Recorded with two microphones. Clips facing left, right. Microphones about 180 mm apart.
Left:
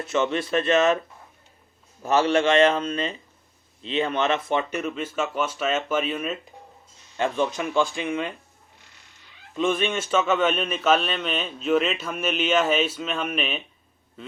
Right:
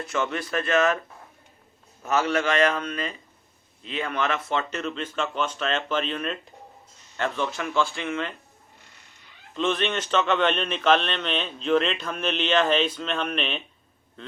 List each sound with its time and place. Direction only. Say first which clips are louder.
0.0 s a man's voice: left 4 dB; 20° left (ahead or behind)
2.0 s a man's voice: left 4 dB; 30° left (ahead or behind); by 6.5 s 5° left (ahead or behind)
7.2 s a man's voice: left 3 dB; 15° left (ahead or behind)
9.6 s a man's voice: left 2 dB; 10° left (ahead or behind)